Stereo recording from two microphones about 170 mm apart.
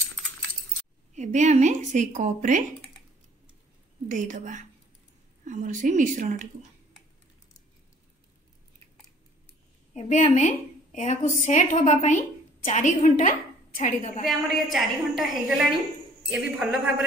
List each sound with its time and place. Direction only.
1.1 s a woman's voice: 45° right (ahead or behind)
4.1 s a woman's voice: 50° right (ahead or behind)
9.9 s a woman's voice: 45° left (ahead or behind)
14.2 s a woman's voice: centre (ahead or behind)